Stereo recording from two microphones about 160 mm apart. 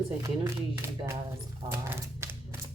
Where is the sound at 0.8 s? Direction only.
15° right (ahead or behind).